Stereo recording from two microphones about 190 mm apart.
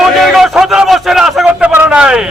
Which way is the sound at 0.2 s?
Centre (ahead or behind).